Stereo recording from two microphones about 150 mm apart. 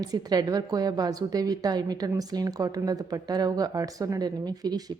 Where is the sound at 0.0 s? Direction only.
25° right (ahead or behind).